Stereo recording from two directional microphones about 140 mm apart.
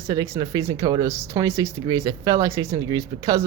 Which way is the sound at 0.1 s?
25° right (ahead or behind).